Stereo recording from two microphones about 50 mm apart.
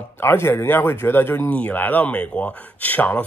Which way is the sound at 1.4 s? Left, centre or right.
Left.